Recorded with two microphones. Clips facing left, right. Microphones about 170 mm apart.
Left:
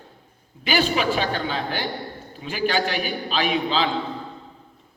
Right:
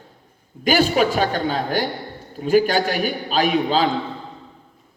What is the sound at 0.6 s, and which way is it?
A man's voice, 45° right (ahead or behind).